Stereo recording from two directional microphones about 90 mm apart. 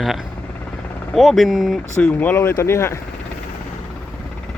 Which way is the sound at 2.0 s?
15° left (ahead or behind).